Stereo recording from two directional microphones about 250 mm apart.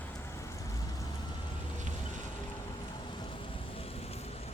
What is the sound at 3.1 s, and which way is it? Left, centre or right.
Vehicle, centre.